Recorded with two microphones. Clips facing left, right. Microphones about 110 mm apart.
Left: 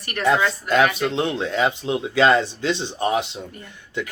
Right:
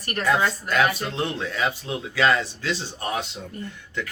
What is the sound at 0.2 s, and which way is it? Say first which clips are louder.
Speech: left 3 dB; 25° left (ahead or behind).